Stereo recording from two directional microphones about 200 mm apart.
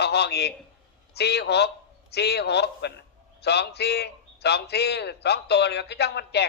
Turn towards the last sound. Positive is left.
turn(degrees=55)  # may be behind; listen again after turning